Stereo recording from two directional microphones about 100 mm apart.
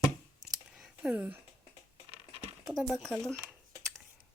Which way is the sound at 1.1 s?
15° right (ahead or behind).